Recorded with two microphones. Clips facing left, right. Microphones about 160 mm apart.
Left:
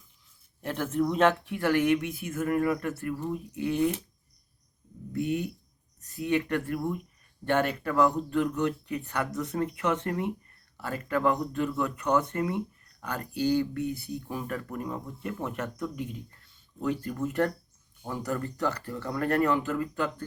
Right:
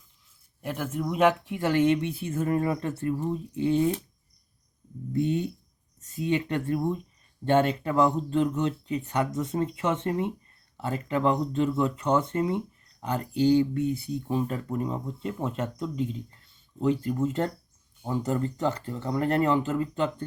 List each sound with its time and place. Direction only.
0.6 s speech: 5° right (ahead or behind); by 3.9 s 25° right (ahead or behind)
5.1 s speech: 25° right (ahead or behind)